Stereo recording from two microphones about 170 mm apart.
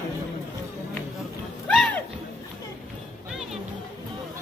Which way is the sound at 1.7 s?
Centre (ahead or behind).